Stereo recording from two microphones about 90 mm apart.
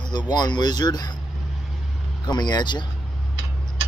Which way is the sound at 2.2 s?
55° left (ahead or behind).